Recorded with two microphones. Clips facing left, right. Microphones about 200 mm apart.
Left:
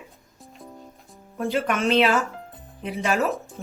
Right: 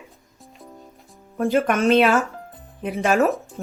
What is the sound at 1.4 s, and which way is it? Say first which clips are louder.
Speech: right 5 dB; 45° right (ahead or behind).